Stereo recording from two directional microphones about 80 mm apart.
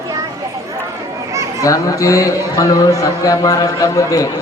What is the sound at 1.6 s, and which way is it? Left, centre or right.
A man's voice, left.